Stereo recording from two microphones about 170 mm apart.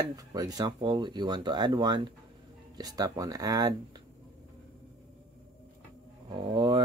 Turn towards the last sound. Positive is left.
turn(degrees=-30)  # may be behind; listen again after turning